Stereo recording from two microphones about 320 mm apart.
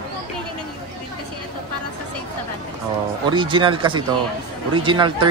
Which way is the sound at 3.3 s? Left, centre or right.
Centre.